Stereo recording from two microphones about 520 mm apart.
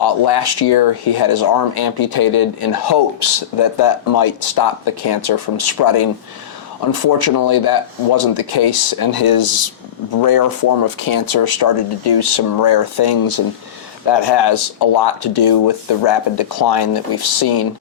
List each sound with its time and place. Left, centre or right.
0.0 s speech: left